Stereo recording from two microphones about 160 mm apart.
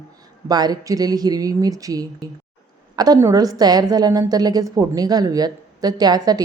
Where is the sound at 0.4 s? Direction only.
25° right (ahead or behind).